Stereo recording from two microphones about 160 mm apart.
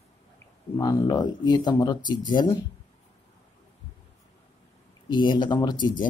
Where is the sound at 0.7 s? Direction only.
20° left (ahead or behind).